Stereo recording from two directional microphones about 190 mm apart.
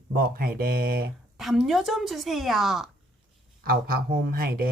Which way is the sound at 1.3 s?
Centre (ahead or behind).